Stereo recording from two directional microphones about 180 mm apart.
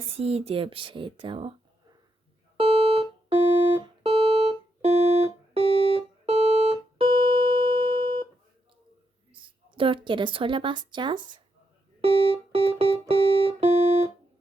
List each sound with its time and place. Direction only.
0.2 s speech: 35° right (ahead or behind)
2.6 s music: 30° right (ahead or behind)
9.3 s a woman's voice: 30° right (ahead or behind)
12.0 s music: 30° right (ahead or behind)